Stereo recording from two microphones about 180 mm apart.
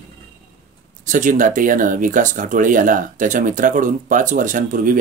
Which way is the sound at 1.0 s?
45° right (ahead or behind).